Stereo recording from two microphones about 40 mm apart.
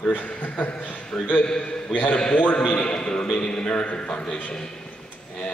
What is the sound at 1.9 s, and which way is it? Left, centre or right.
Speech, left.